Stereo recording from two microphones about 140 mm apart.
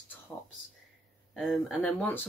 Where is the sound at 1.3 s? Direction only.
Centre (ahead or behind).